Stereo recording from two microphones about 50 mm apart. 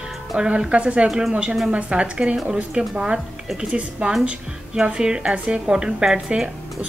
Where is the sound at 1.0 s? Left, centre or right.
Centre.